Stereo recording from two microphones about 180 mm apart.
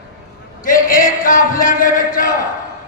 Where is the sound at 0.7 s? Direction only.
50° left (ahead or behind).